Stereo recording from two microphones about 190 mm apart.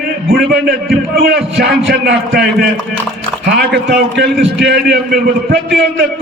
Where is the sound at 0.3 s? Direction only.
50° right (ahead or behind).